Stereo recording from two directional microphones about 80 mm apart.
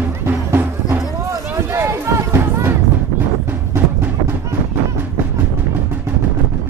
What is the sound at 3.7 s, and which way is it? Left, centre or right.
Music, right.